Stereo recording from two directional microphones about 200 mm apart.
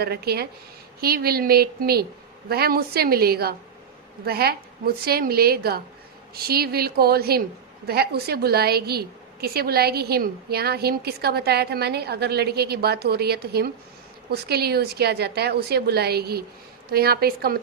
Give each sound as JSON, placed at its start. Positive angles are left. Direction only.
{"t": 0.0, "sound": "a woman's voice", "side_deg": -50}